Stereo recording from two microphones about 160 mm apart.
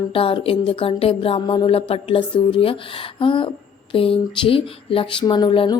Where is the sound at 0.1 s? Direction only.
35° left (ahead or behind).